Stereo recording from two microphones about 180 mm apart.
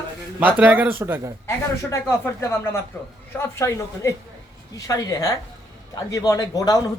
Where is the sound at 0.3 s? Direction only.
10° right (ahead or behind).